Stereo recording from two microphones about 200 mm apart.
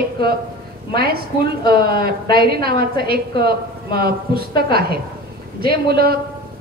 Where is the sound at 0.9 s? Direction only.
50° right (ahead or behind).